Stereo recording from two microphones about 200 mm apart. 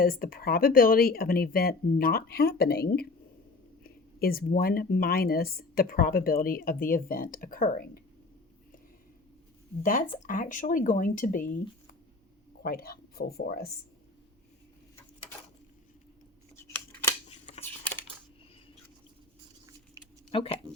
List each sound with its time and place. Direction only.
0.0 s speech: 45° left (ahead or behind)
9.8 s speech: 45° left (ahead or behind)
12.6 s speech: 50° left (ahead or behind)
16.6 s scissors: 15° left (ahead or behind)
17.2 s shuffling cards: 30° left (ahead or behind)
17.6 s a sound: 10° left (ahead or behind)
20.3 s speech: 25° left (ahead or behind)